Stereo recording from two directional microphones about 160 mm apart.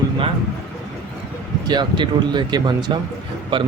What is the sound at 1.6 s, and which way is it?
Speech, 30° right (ahead or behind).